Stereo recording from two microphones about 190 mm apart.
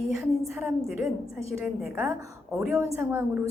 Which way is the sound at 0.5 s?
5° right (ahead or behind).